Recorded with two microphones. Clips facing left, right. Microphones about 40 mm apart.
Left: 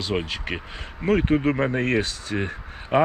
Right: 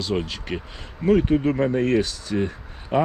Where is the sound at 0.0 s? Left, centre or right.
Left.